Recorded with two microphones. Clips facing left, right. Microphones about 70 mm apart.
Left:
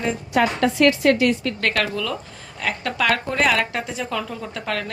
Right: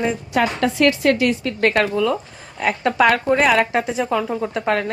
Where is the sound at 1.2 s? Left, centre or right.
Right.